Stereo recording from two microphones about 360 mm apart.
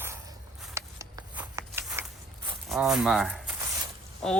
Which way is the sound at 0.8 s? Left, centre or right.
Centre.